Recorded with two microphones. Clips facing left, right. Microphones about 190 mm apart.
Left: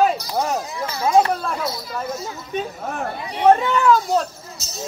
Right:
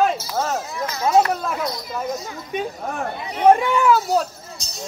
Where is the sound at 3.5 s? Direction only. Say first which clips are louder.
Even; 10° right (ahead or behind).